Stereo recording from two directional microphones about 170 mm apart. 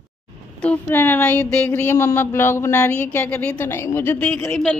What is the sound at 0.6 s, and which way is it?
Speech, 10° left (ahead or behind).